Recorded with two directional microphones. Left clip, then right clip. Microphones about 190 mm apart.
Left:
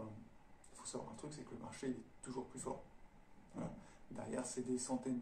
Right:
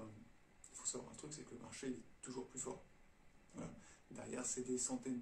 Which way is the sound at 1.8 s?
10° right (ahead or behind).